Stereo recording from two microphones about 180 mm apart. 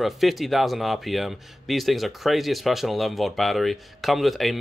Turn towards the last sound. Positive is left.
turn(degrees=0)  # may be behind; listen again after turning